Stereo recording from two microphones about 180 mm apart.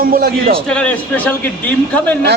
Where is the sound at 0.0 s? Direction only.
55° right (ahead or behind).